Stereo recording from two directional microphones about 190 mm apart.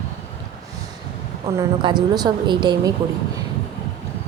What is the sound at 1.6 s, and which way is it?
A woman's voice, 25° right (ahead or behind).